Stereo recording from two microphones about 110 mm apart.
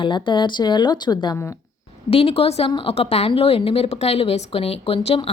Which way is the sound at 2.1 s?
65° left (ahead or behind).